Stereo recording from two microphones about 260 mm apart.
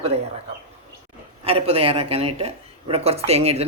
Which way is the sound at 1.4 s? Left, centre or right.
Right.